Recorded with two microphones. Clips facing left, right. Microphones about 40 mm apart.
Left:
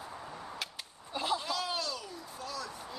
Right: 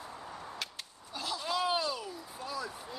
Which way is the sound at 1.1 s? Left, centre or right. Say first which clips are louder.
Left 5 dB; left.